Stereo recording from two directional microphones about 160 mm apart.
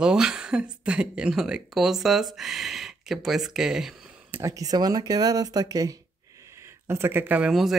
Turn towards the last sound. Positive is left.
turn(degrees=-5)  # may be behind; listen again after turning